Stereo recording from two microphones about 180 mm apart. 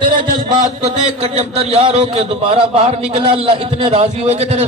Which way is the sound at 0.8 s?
35° right (ahead or behind).